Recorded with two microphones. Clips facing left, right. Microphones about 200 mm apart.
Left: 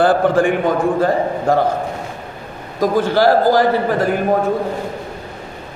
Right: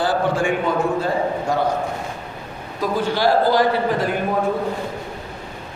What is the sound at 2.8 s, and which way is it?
Speech, 45° left (ahead or behind).